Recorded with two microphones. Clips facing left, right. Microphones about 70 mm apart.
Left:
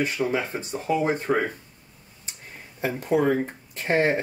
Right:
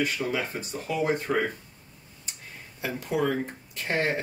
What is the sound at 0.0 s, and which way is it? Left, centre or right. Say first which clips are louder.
Speech: left 3 dB; left.